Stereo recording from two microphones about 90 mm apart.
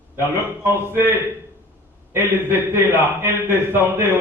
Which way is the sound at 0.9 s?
25° right (ahead or behind).